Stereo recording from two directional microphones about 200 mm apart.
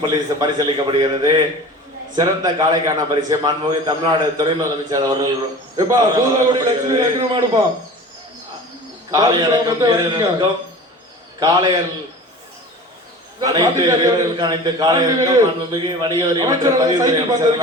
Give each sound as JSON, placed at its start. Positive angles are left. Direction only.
{"t": 0.0, "sound": "a man's voice", "side_deg": -20}
{"t": 9.1, "sound": "a man's voice", "side_deg": -20}
{"t": 13.4, "sound": "a man's voice", "side_deg": -20}